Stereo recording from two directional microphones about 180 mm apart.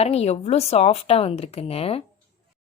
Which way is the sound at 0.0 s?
35° left (ahead or behind).